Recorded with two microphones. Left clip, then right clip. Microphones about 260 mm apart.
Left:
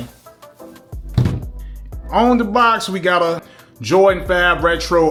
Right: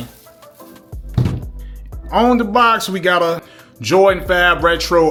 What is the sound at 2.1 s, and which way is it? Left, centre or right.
Speech, centre.